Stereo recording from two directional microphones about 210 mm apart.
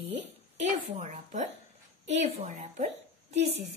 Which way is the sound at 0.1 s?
30° right (ahead or behind).